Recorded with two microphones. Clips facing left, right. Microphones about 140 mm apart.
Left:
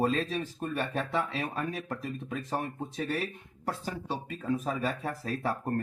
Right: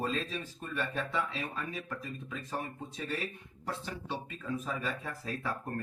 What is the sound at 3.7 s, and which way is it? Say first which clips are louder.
Speech: left 4 dB; 45° left (ahead or behind).